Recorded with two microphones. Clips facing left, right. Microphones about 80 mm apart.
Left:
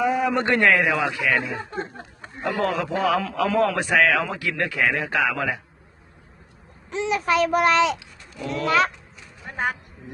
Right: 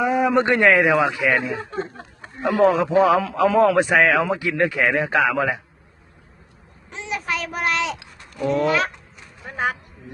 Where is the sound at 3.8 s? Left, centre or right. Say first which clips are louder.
Right 3 dB; right.